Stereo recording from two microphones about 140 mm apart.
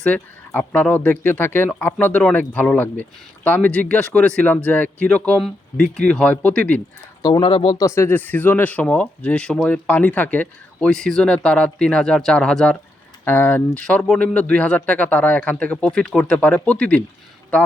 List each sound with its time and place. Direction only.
0.0 s speech: 10° left (ahead or behind)
7.2 s speech: 30° left (ahead or behind)
7.8 s speech: 20° left (ahead or behind)